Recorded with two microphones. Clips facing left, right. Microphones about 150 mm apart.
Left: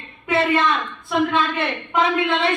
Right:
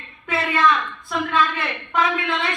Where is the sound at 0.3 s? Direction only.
25° left (ahead or behind).